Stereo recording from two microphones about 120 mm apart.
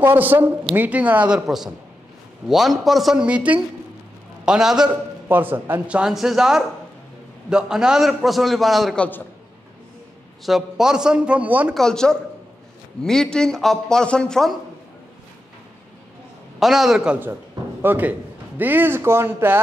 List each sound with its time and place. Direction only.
0.0 s a man's voice: 15° right (ahead or behind)
5.3 s a man's voice: 15° right (ahead or behind); by 9.0 s centre (ahead or behind)
10.4 s speech: 5° right (ahead or behind)
11.7 s a man's voice: 5° left (ahead or behind)
16.5 s a man's voice: centre (ahead or behind); by 19.6 s 20° right (ahead or behind)